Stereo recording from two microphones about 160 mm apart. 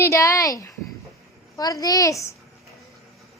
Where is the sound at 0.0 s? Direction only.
20° left (ahead or behind).